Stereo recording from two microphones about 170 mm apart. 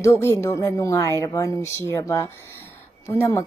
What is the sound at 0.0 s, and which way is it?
Speech, 15° left (ahead or behind).